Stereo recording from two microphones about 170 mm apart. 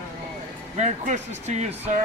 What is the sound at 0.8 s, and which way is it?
Speech, 45° right (ahead or behind).